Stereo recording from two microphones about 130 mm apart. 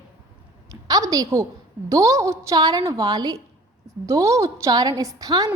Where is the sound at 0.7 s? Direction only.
25° right (ahead or behind).